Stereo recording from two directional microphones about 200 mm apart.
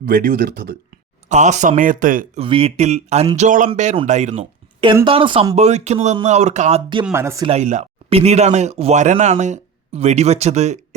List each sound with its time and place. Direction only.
0.0 s speech: 45° right (ahead or behind)
1.3 s speech: 35° right (ahead or behind)
2.4 s speech: 30° right (ahead or behind)
7.0 s speech: 10° right (ahead or behind)
7.4 s speech: 35° right (ahead or behind)